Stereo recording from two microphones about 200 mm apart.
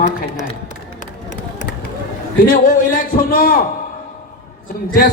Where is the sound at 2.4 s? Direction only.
45° left (ahead or behind).